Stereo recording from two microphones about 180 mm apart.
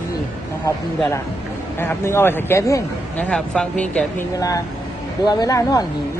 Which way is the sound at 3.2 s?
5° left (ahead or behind).